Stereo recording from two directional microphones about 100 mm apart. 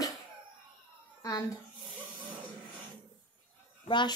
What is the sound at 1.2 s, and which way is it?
Speech, 35° left (ahead or behind).